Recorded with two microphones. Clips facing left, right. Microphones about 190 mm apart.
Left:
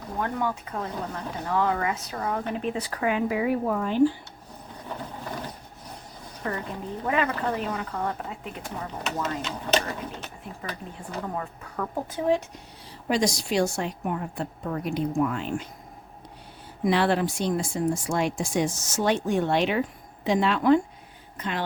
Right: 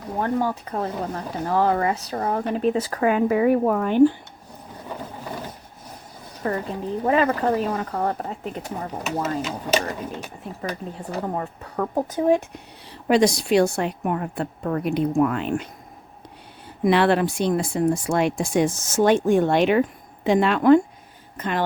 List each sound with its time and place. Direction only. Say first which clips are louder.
0.2 s speech: right 5 dB; 35° right (ahead or behind); by 4.1 s 60° right (ahead or behind)
6.4 s speech: right 6 dB; 40° right (ahead or behind)
9.4 s speech: right 3 dB; 5° right (ahead or behind)
11.3 s speech: right 5 dB; 35° right (ahead or behind)
13.1 s speech: right 7 dB; 65° right (ahead or behind)
16.8 s speech: right 4 dB; 65° right (ahead or behind); by 21.6 s 50° right (ahead or behind)